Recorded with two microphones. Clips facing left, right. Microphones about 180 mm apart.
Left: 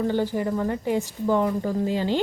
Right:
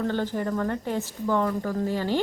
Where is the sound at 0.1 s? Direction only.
10° left (ahead or behind).